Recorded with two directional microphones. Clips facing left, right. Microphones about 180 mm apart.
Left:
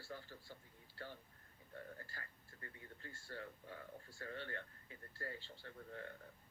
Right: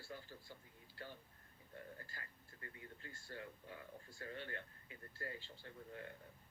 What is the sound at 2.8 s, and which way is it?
Speech, 15° right (ahead or behind).